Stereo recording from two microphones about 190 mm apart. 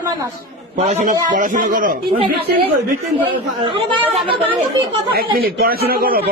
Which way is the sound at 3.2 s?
25° right (ahead or behind).